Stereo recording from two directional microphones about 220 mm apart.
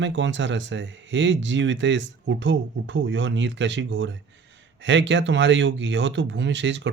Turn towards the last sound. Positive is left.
turn(degrees=-55)  # may be behind; listen again after turning